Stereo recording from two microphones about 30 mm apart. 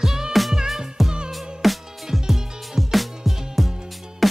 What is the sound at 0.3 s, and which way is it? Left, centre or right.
Music, centre.